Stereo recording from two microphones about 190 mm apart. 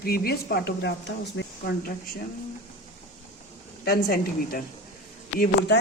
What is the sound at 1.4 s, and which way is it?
Speech, 75° left (ahead or behind).